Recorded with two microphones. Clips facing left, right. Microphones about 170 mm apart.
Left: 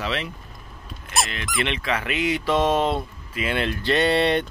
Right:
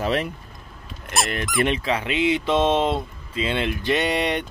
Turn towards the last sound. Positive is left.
turn(degrees=-15)  # may be behind; listen again after turning